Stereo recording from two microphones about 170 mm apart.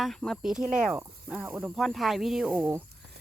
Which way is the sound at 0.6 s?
50° right (ahead or behind).